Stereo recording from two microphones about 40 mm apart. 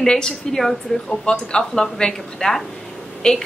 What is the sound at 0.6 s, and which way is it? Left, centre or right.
Speech, centre.